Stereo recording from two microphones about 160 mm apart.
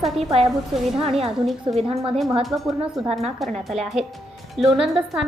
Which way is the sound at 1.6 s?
35° right (ahead or behind).